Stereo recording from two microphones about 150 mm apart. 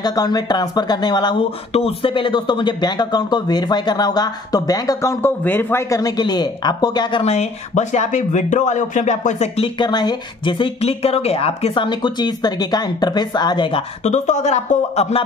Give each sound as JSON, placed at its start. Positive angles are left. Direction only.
{"t": 0.0, "sound": "speech", "side_deg": 25}
{"t": 1.7, "sound": "speech", "side_deg": 40}
{"t": 7.3, "sound": "speech", "side_deg": 50}
{"t": 9.8, "sound": "speech", "side_deg": 30}
{"t": 14.0, "sound": "speech", "side_deg": 50}